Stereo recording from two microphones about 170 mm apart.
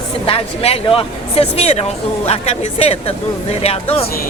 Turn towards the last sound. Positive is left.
turn(degrees=35)  # may be behind; listen again after turning